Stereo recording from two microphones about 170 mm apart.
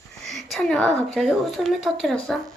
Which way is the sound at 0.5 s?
5° left (ahead or behind).